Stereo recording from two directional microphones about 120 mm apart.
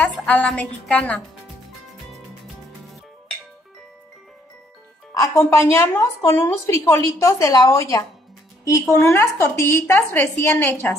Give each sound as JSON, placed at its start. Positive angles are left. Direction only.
{"t": 0.0, "sound": "a woman's voice", "side_deg": 5}
{"t": 2.0, "sound": "music", "side_deg": 0}
{"t": 5.1, "sound": "a woman's voice", "side_deg": 25}
{"t": 9.0, "sound": "a woman's voice", "side_deg": 25}